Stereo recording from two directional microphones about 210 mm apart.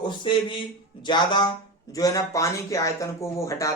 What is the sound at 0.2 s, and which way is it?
Speech, 25° left (ahead or behind).